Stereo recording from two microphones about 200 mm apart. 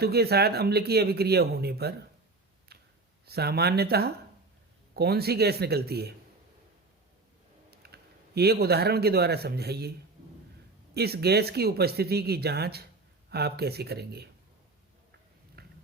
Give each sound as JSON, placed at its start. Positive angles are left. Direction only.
{"t": 0.0, "sound": "a man's voice", "side_deg": -50}
{"t": 2.7, "sound": "clicking", "side_deg": -55}
{"t": 3.2, "sound": "a man's voice", "side_deg": -50}
{"t": 7.7, "sound": "computer keyboard", "side_deg": -55}
{"t": 8.4, "sound": "a man's voice", "side_deg": -50}
{"t": 10.9, "sound": "a man's voice", "side_deg": -50}
{"t": 15.6, "sound": "a sound", "side_deg": -50}